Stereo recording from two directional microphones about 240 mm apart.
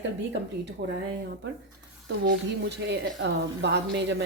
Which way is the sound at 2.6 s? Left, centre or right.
Right.